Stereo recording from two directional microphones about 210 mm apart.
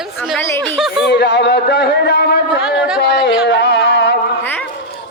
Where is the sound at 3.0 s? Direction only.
55° left (ahead or behind).